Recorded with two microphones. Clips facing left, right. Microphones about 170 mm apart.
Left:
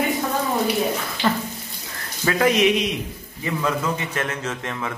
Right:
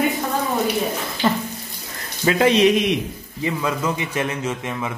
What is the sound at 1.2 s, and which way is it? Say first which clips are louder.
A man's voice: right 2 dB; 20° right (ahead or behind).